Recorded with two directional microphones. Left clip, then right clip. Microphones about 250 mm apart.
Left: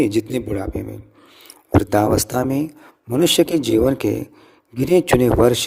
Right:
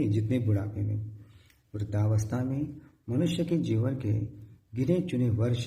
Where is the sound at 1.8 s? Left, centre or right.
Left.